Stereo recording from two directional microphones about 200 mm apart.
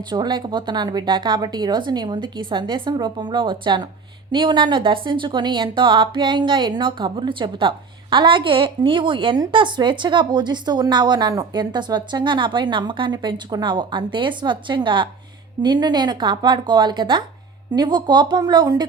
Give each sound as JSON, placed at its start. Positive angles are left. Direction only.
{"t": 0.1, "sound": "speech", "side_deg": -20}